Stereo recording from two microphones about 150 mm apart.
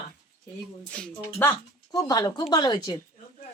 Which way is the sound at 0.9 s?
5° left (ahead or behind).